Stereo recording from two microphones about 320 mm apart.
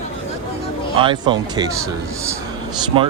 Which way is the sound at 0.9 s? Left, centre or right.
Centre.